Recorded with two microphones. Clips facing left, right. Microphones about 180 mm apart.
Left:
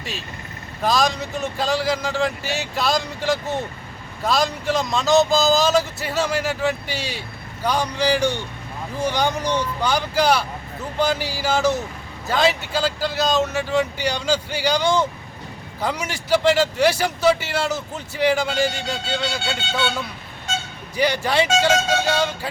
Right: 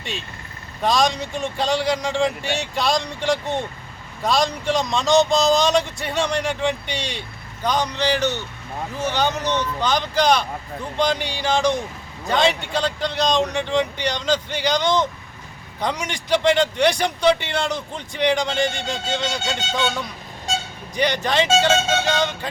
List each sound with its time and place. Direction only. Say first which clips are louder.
0.0 s a man's voice: even; centre (ahead or behind)
20.5 s vehicle: right 2 dB; 30° right (ahead or behind)
20.9 s a man's voice: left 1 dB; 10° left (ahead or behind)